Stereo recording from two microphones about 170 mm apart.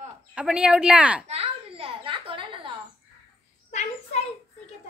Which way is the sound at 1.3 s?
35° right (ahead or behind).